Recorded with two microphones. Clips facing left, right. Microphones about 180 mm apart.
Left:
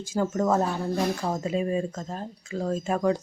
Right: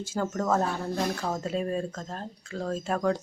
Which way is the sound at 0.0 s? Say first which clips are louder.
Left 4 dB; 10° left (ahead or behind).